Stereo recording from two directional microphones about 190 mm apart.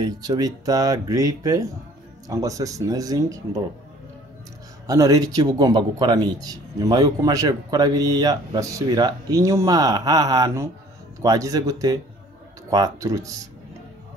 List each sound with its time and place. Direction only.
0.0 s speech: 20° right (ahead or behind)
4.8 s speech: 20° right (ahead or behind)